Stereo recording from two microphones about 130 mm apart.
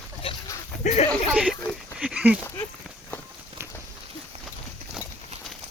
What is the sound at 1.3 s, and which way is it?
Speech, 5° right (ahead or behind).